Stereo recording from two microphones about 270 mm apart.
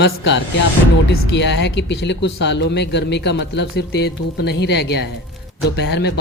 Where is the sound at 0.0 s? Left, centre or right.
Left.